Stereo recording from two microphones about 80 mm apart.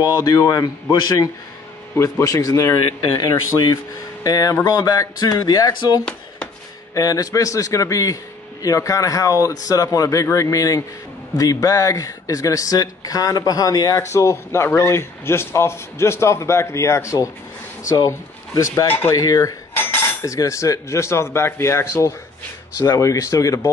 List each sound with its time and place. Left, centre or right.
0.2 s speech: left
0.9 s a man's voice: left
2.0 s speech: left
14.1 s a man's voice: left
17.9 s speech: left
18.9 s speech: left
19.1 s speech: left
19.7 s cutlery: left
20.2 s a man's voice: left